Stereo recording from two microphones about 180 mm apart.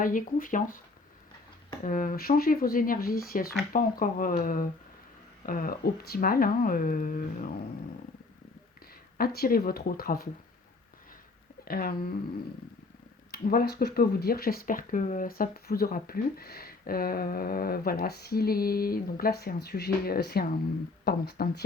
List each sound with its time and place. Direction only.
0.0 s speech: 50° left (ahead or behind)
1.8 s speech: 50° left (ahead or behind)
9.1 s speech: 55° left (ahead or behind)
11.7 s speech: 55° left (ahead or behind)
13.3 s speech: 60° left (ahead or behind)